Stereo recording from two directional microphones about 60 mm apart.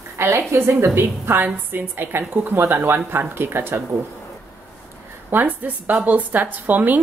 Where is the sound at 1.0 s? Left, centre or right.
Right.